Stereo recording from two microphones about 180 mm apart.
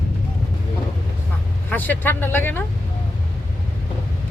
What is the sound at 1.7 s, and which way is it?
Speech, 10° left (ahead or behind).